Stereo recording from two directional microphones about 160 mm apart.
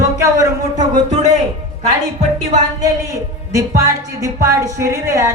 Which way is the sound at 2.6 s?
20° right (ahead or behind).